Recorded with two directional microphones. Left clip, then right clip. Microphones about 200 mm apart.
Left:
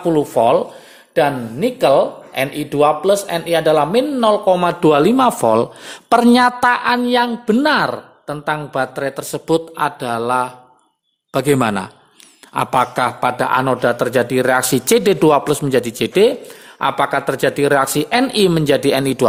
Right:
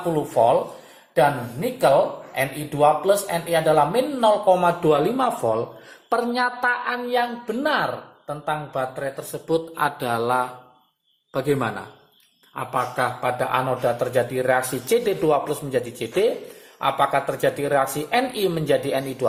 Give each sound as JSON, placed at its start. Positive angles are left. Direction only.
{"t": 0.1, "sound": "speech", "side_deg": 55}
{"t": 6.1, "sound": "a woman's voice", "side_deg": 45}
{"t": 9.7, "sound": "mantra", "side_deg": 20}
{"t": 11.3, "sound": "a man's voice", "side_deg": 35}